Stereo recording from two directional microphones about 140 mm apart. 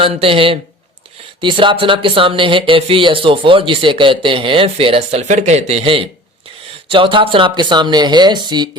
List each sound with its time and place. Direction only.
0.0 s speech: 40° right (ahead or behind)